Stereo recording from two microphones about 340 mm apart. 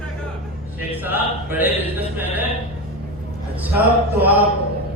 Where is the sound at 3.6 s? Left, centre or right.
Centre.